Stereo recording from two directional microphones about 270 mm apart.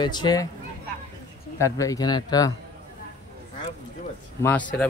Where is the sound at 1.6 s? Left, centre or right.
Centre.